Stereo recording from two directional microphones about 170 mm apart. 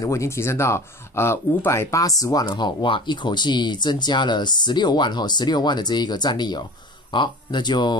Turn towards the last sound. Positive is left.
turn(degrees=25)  # may be behind; listen again after turning